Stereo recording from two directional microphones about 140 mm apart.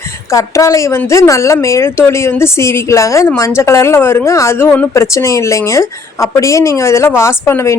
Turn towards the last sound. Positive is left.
turn(degrees=20)  # may be behind; listen again after turning